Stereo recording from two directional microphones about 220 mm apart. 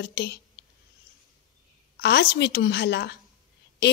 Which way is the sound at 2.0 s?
50° left (ahead or behind).